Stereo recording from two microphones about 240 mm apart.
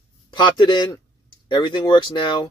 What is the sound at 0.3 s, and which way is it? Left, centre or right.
Speech, centre.